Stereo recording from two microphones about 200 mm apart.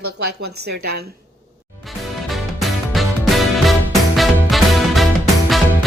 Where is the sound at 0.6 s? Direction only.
55° right (ahead or behind).